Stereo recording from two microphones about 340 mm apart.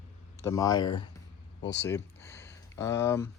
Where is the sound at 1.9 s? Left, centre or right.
Centre.